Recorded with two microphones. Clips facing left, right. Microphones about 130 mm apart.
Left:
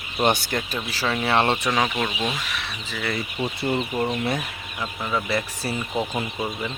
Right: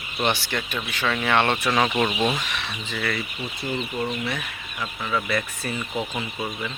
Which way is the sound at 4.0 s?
40° left (ahead or behind).